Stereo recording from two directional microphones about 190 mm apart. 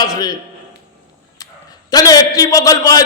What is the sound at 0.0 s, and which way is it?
Speech, 20° left (ahead or behind).